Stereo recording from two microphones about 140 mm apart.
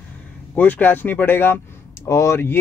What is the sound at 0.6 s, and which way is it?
Speech, 10° left (ahead or behind).